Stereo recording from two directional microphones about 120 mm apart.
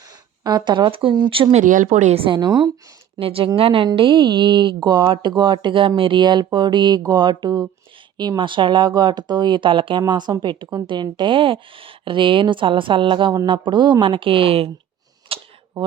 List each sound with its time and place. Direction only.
0.1 s speech: 35° right (ahead or behind)
1.5 s speech: 90° right
2.1 s speech: 45° right (ahead or behind)
3.2 s speech: 50° right (ahead or behind)
15.3 s camera: 50° right (ahead or behind)